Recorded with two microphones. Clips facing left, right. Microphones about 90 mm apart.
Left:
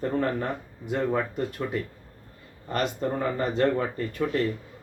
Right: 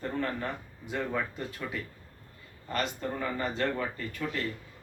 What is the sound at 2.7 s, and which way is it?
Speech, 40° left (ahead or behind).